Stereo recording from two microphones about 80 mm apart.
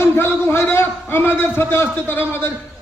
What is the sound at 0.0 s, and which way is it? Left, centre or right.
A man's voice, left.